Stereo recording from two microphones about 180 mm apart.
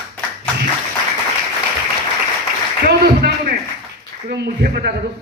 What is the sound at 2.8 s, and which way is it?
A man's voice, 60° right (ahead or behind).